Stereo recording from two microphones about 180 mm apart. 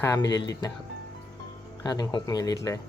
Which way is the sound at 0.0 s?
20° left (ahead or behind).